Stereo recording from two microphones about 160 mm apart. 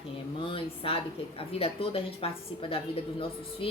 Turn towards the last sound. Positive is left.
turn(degrees=35)  # may be behind; listen again after turning